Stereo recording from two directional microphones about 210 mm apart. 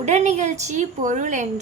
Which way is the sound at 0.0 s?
35° right (ahead or behind).